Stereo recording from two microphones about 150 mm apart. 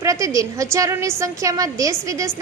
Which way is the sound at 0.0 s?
20° right (ahead or behind).